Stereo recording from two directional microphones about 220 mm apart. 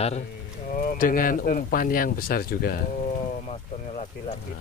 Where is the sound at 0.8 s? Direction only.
40° left (ahead or behind).